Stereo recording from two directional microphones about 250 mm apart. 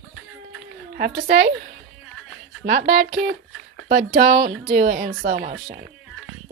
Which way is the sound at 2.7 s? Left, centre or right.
Right.